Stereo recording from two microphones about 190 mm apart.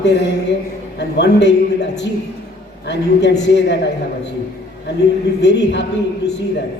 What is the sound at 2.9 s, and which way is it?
Speech, 65° left (ahead or behind).